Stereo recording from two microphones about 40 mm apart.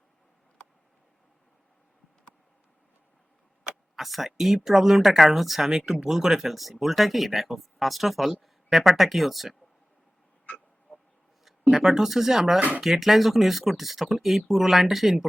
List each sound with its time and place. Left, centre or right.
3.9 s speech: centre
10.9 s a sound: centre
11.7 s speech: centre
12.5 s speech: right
12.8 s speech: centre